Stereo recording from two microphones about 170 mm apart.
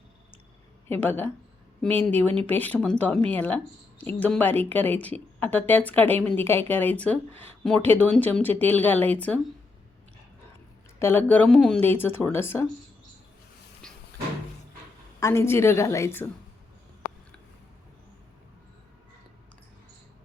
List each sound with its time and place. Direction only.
0.9 s speech: 10° left (ahead or behind)
11.0 s speech: 10° left (ahead or behind)
13.8 s cupboard open or close: 5° left (ahead or behind)
15.2 s speech: 15° left (ahead or behind)